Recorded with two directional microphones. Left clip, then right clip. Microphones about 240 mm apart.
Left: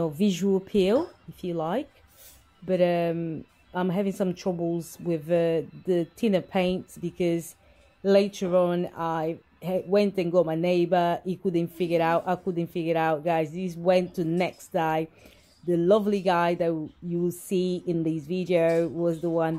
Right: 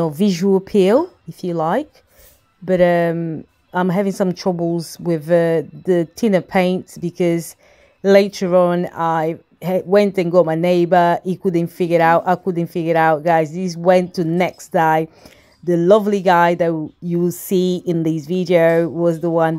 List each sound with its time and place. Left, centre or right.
0.0 s speech: right